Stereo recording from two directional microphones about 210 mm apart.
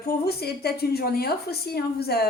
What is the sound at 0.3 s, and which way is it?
A woman's voice, 50° left (ahead or behind).